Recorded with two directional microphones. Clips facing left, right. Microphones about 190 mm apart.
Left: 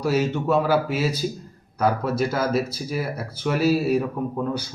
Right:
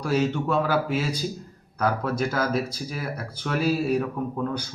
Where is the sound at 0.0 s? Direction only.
5° left (ahead or behind).